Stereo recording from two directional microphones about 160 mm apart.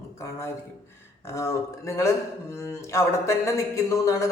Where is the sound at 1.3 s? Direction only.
20° left (ahead or behind).